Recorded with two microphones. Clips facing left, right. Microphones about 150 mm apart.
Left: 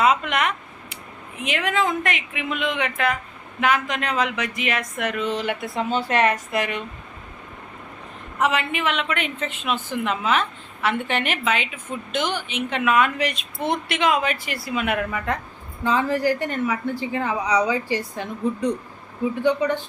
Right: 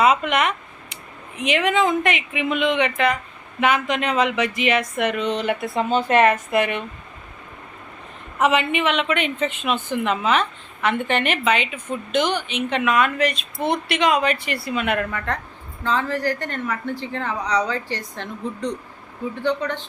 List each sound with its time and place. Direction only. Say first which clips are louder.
0.0 s a sound: right 2 dB; centre (ahead or behind)
1.4 s speech: right 4 dB; centre (ahead or behind)
5.7 s speech: right 3 dB; 45° right (ahead or behind)
6.1 s speech: right 5 dB; centre (ahead or behind)
8.4 s a woman's voice: right 3 dB; centre (ahead or behind)